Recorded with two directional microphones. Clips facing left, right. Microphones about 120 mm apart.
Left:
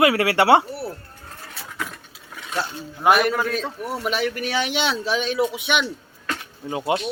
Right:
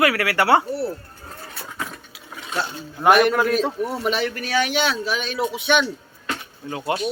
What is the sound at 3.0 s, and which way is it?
A man's voice, centre (ahead or behind).